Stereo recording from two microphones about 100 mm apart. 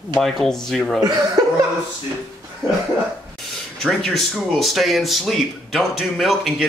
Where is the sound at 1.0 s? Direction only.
45° right (ahead or behind).